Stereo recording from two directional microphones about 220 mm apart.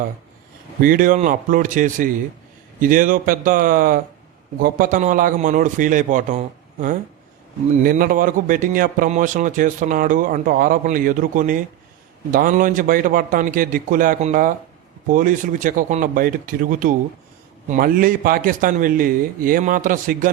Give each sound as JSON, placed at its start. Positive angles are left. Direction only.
{"t": 0.8, "sound": "a man's voice", "side_deg": -40}